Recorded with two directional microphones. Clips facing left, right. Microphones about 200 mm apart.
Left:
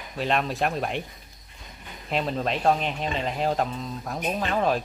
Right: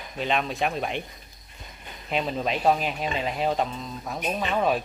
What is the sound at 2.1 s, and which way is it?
Speech, centre (ahead or behind).